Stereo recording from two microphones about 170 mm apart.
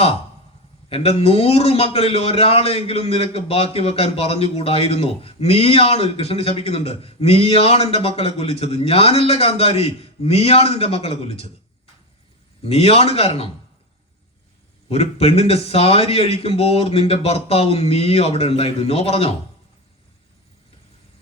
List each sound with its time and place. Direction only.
0.9 s a man's voice: 35° left (ahead or behind)
12.6 s a man's voice: 35° left (ahead or behind)
14.8 s a man's voice: 35° left (ahead or behind)